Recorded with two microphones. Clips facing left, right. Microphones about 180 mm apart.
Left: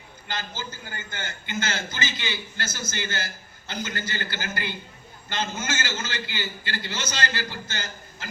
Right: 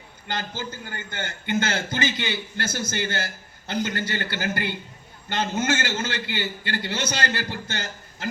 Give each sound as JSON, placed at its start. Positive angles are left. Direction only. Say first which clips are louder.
{"t": 0.3, "sound": "a man's voice", "louder": "right 3 dB", "side_deg": -60}